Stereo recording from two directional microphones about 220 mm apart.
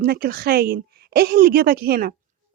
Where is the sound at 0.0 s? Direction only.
45° right (ahead or behind).